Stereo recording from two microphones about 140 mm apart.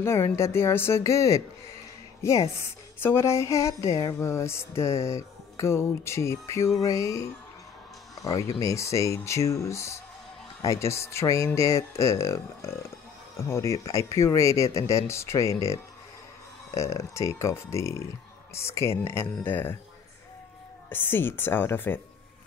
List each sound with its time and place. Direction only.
0.0 s music: 20° left (ahead or behind)
2.2 s a woman's voice: 20° left (ahead or behind)
3.0 s music: 15° left (ahead or behind)
8.2 s speech: 25° left (ahead or behind)
8.5 s music: 20° left (ahead or behind)
16.7 s music: 20° left (ahead or behind)
18.5 s speech: 20° left (ahead or behind)
20.9 s speech: 15° left (ahead or behind)